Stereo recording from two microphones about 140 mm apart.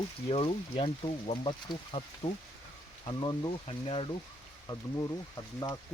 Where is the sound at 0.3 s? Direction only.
40° left (ahead or behind).